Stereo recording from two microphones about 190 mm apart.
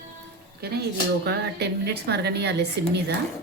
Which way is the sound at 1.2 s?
60° right (ahead or behind).